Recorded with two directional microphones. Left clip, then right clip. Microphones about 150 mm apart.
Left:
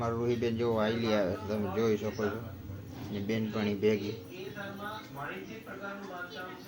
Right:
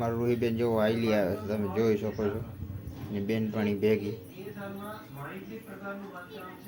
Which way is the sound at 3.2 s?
30° right (ahead or behind).